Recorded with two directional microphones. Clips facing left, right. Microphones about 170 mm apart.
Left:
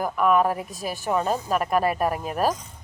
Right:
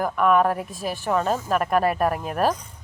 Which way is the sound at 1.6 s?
45° right (ahead or behind).